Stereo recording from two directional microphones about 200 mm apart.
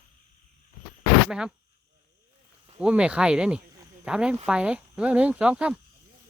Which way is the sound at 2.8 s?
5° right (ahead or behind).